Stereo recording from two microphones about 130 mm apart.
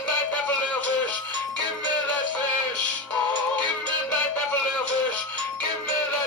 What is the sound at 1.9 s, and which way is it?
Synthetic singing, 10° left (ahead or behind).